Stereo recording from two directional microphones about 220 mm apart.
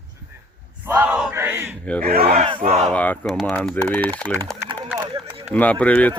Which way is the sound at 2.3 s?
25° right (ahead or behind).